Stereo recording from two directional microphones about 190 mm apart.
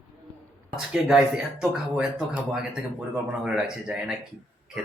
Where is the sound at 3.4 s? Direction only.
5° right (ahead or behind).